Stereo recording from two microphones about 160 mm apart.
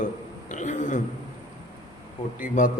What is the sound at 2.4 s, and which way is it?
Speech, 55° left (ahead or behind).